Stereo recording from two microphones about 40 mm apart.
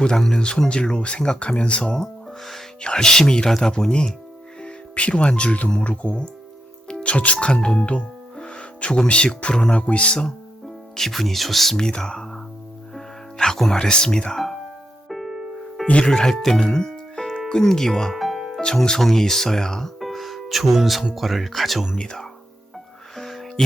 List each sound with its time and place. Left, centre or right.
0.0 s speech: centre
4.6 s speech: left
10.9 s speech: centre
11.8 s speech: centre
13.7 s speech: centre
15.1 s music: centre
15.9 s speech: left
16.3 s speech: centre
18.1 s music: centre
18.6 s speech: centre
20.0 s music: centre
21.2 s speech: centre
21.9 s speech: centre
23.1 s music: centre